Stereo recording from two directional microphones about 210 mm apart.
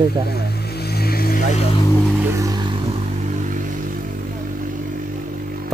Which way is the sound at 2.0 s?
10° right (ahead or behind).